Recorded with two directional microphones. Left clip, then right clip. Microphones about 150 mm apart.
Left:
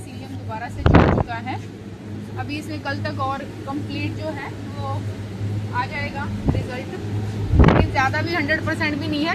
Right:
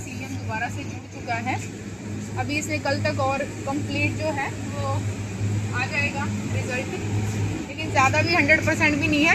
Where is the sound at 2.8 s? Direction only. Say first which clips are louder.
Even; 45° right (ahead or behind).